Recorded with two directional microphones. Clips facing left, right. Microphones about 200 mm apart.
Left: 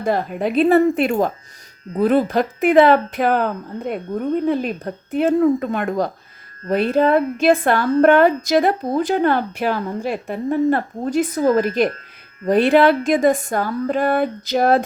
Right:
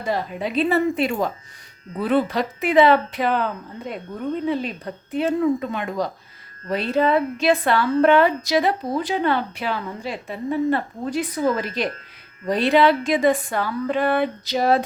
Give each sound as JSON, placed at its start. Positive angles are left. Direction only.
{"t": 0.0, "sound": "a woman's voice", "side_deg": 50}